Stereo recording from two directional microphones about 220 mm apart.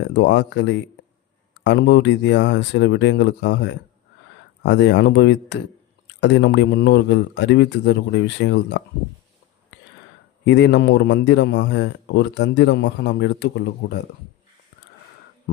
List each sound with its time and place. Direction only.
0.1 s a man's voice: 50° left (ahead or behind)
10.4 s a man's voice: 55° left (ahead or behind)